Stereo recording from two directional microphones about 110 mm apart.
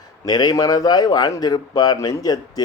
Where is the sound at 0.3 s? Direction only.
40° left (ahead or behind).